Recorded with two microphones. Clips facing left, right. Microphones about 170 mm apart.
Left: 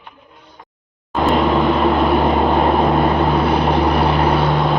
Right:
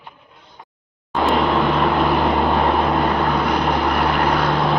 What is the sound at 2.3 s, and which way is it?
Vehicle, 15° left (ahead or behind).